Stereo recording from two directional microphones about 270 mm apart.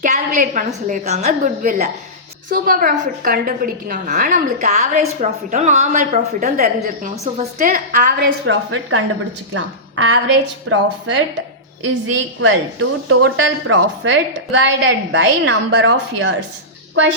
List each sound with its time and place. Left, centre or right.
0.0 s a woman's voice: right
9.6 s a woman's voice: right
12.4 s a woman's voice: right